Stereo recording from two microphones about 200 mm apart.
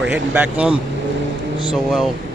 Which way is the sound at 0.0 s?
5° right (ahead or behind).